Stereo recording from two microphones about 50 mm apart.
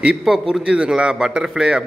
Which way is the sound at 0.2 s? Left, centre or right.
Centre.